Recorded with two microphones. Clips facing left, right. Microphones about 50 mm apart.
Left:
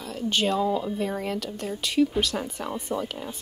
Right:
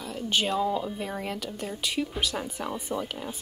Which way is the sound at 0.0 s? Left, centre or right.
Centre.